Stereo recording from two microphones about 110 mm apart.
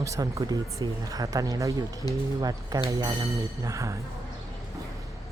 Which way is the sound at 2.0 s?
35° left (ahead or behind).